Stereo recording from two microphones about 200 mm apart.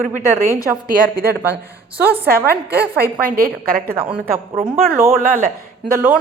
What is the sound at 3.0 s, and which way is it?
Speech, 45° right (ahead or behind).